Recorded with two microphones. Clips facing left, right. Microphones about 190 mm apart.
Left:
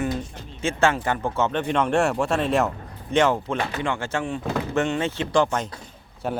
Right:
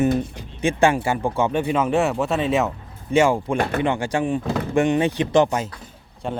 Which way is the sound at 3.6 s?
55° right (ahead or behind).